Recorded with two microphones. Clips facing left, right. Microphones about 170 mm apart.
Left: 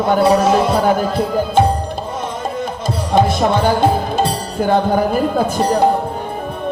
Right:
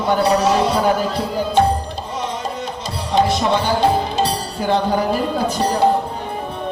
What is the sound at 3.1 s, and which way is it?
Music, 50° left (ahead or behind).